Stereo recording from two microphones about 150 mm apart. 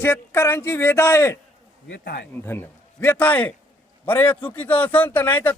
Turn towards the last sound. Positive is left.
turn(degrees=10)  # may be behind; listen again after turning